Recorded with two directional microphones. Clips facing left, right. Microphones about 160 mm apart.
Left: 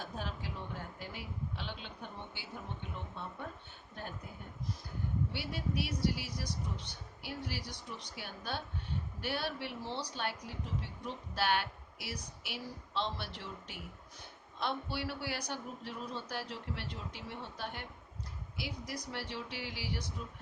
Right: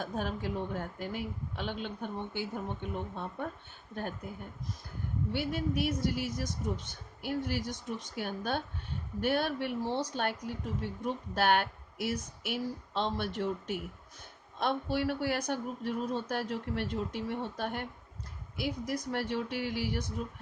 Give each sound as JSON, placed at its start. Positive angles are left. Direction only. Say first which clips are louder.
{"t": 0.0, "sound": "a woman's voice", "louder": "right 7 dB", "side_deg": -50}
{"t": 5.3, "sound": "a woman's voice", "louder": "right 6 dB", "side_deg": -50}